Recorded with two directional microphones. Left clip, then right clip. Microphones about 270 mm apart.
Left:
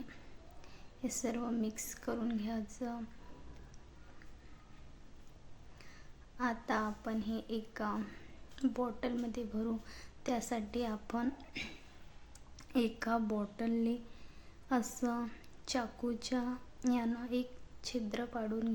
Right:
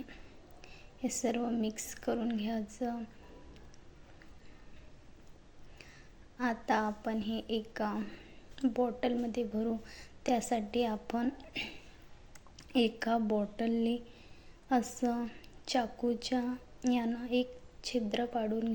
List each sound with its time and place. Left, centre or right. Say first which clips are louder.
1.0 s a woman's voice: right 5 dB; centre
6.3 s a woman's voice: right 4 dB; centre